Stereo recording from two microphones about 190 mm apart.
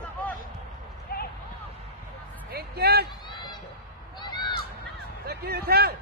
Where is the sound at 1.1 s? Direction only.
50° left (ahead or behind).